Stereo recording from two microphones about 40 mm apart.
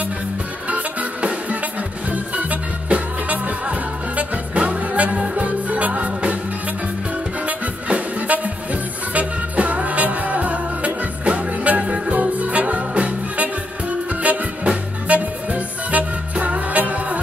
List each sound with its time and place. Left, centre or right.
0.7 s music: right
7.4 s music: right